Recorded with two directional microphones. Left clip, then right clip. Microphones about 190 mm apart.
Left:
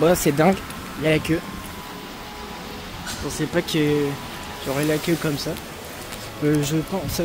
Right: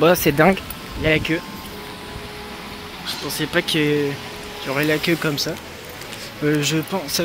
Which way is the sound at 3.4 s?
10° left (ahead or behind).